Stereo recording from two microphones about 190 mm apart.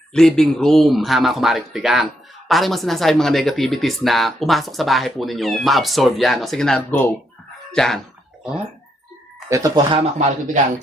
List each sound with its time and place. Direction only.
0.1 s speech: 5° left (ahead or behind)
9.5 s speech: 20° right (ahead or behind)
10.0 s speech: 40° right (ahead or behind)